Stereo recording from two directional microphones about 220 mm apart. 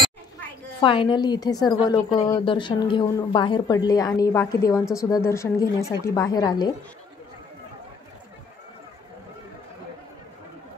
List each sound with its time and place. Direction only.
0.7 s a woman's voice: 20° left (ahead or behind)